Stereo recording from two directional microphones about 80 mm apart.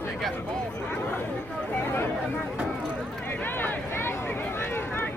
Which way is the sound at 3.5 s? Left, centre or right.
Left.